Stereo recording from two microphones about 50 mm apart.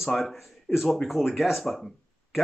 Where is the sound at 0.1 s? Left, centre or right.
Centre.